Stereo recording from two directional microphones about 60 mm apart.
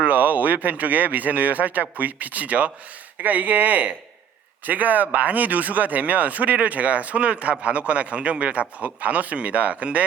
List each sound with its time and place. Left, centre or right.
0.0 s speech: right